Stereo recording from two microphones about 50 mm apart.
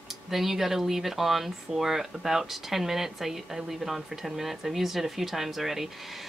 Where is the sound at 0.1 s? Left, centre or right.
Centre.